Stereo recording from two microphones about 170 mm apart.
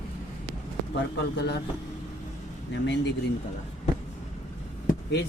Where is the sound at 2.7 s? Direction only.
90° left.